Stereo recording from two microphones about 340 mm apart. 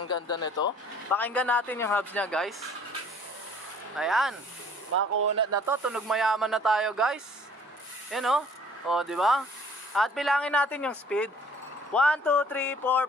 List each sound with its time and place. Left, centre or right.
0.1 s speech: centre
3.9 s speech: centre
4.9 s speech: right
5.7 s speech: centre